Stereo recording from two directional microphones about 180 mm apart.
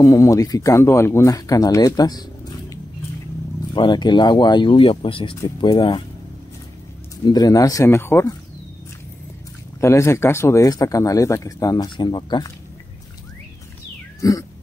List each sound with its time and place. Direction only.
0.0 s speech: 20° left (ahead or behind)
3.7 s speech: 25° left (ahead or behind)
7.2 s speech: 20° left (ahead or behind)
9.8 s speech: 15° left (ahead or behind)
14.2 s speech: 20° left (ahead or behind)